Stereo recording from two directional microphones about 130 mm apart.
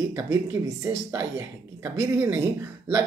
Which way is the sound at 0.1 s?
25° right (ahead or behind).